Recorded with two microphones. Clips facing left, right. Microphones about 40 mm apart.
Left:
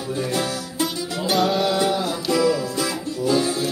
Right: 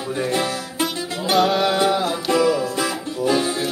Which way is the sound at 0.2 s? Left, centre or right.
Right.